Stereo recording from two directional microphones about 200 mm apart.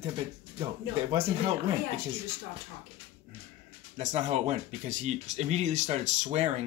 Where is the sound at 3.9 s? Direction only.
35° right (ahead or behind).